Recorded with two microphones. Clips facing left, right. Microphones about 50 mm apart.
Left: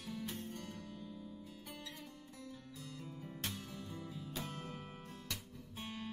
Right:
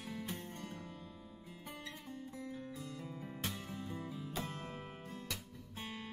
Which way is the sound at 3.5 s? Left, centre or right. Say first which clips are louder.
Right 3 dB; right.